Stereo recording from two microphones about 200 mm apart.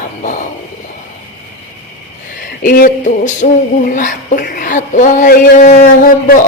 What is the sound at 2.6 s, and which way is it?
Speech, 45° left (ahead or behind).